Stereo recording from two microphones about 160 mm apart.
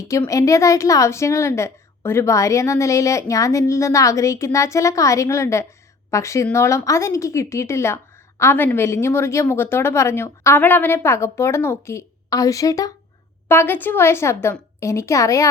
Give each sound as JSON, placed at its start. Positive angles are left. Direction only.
{"t": 0.0, "sound": "a woman's voice", "side_deg": 20}